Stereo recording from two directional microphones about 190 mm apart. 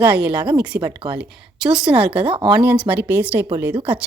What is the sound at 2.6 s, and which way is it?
Speech, 10° right (ahead or behind).